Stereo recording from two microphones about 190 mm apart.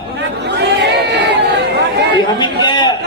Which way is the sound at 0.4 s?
65° right (ahead or behind).